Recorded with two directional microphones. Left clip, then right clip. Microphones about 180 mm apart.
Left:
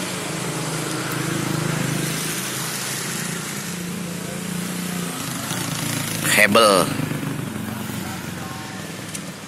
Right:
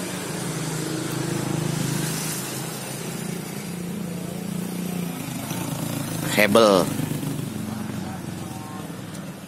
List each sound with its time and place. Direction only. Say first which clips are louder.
6.3 s speech: left 2 dB; 15° right (ahead or behind)